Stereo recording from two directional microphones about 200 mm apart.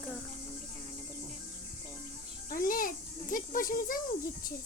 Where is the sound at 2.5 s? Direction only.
45° left (ahead or behind).